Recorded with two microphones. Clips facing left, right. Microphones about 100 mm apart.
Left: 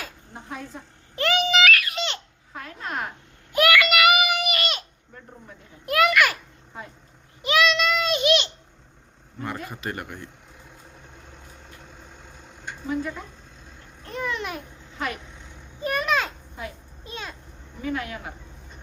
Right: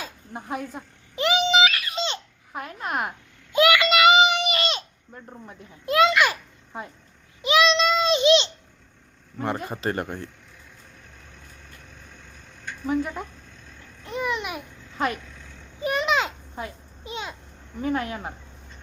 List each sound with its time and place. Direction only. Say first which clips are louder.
0.0 s a sound: right 3 dB; 20° right (ahead or behind)
5.8 s a child's voice: right 1 dB; 25° right (ahead or behind)
7.4 s child singing: right 2 dB; 20° right (ahead or behind)
9.4 s speech: right 5 dB; 30° right (ahead or behind)
11.9 s vehicle: left 2 dB; 25° left (ahead or behind)
14.0 s babbling: right 2 dB; 15° right (ahead or behind)
15.4 s a sound: even; 20° left (ahead or behind)
15.8 s a sound: right 1 dB; 20° right (ahead or behind)
17.8 s speech: right 3 dB; 35° right (ahead or behind)